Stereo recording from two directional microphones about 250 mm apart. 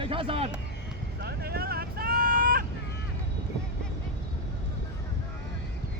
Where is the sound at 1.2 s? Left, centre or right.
Right.